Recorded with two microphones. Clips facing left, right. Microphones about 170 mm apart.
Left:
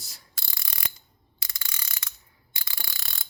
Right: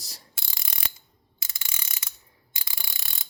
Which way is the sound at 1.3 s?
25° right (ahead or behind).